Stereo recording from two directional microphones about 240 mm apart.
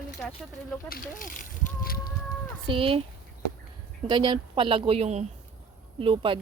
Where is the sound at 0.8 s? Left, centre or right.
Left.